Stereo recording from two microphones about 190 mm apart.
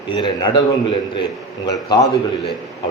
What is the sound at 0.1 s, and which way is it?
A man's voice, 25° left (ahead or behind).